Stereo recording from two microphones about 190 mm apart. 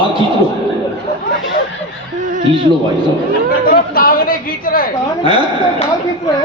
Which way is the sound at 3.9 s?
50° left (ahead or behind).